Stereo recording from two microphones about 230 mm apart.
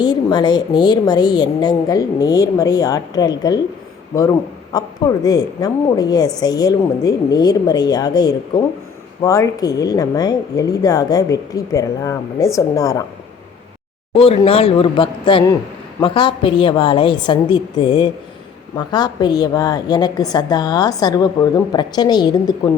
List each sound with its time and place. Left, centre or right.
0.0 s a woman's voice: centre
4.7 s a woman's voice: centre
14.1 s a woman's voice: left